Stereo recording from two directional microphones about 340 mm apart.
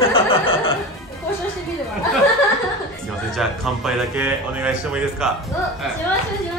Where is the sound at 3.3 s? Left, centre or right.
Centre.